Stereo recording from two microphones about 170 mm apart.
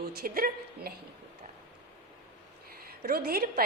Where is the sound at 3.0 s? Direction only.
60° right (ahead or behind).